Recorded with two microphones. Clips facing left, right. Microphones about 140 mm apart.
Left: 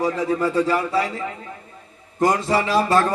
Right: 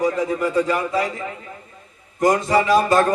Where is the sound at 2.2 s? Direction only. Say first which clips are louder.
Right 2 dB; 30° left (ahead or behind).